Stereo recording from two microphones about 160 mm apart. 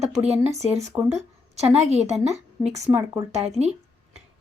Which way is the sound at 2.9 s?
15° right (ahead or behind).